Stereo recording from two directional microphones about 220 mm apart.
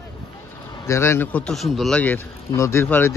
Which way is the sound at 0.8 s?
10° left (ahead or behind).